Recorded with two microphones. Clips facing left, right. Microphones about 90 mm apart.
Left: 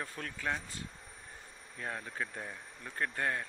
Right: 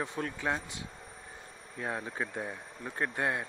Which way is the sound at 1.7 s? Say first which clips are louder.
Right 4 dB; 20° right (ahead or behind).